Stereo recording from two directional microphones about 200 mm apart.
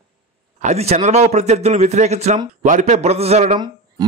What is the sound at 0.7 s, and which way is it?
Speech, 30° right (ahead or behind).